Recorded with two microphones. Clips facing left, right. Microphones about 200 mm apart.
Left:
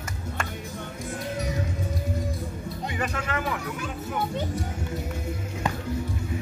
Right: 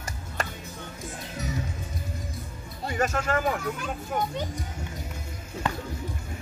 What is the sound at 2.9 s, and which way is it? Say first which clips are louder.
Speech: right 5 dB; 45° right (ahead or behind).